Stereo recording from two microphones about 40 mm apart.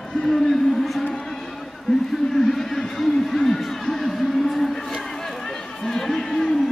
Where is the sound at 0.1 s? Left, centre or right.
Centre.